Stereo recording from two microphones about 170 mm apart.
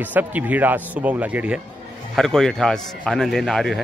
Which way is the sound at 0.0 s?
10° right (ahead or behind).